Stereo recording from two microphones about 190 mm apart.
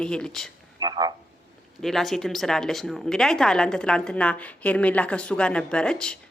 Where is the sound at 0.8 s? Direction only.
20° right (ahead or behind).